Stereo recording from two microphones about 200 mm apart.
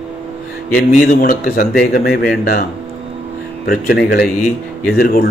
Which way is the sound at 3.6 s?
45° left (ahead or behind).